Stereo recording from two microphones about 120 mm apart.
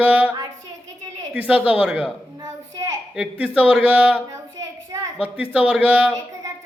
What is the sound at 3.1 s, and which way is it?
Speech, 5° right (ahead or behind).